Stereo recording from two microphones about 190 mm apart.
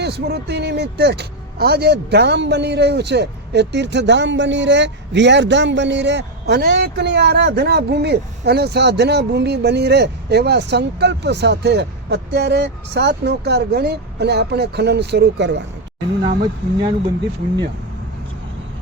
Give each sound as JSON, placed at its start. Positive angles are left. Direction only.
{"t": 0.0, "sound": "speech", "side_deg": -60}
{"t": 16.2, "sound": "speech", "side_deg": -30}